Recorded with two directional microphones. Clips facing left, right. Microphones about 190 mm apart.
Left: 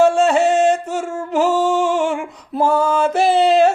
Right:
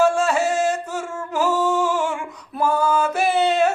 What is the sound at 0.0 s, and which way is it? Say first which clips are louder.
Music: left 5 dB; 25° left (ahead or behind).